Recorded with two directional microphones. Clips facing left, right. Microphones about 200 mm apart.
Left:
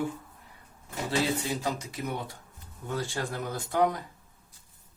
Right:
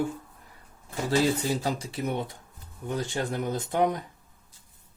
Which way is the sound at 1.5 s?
35° right (ahead or behind).